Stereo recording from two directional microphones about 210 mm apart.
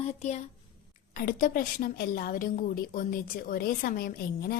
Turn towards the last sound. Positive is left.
turn(degrees=45)  # may be behind; listen again after turning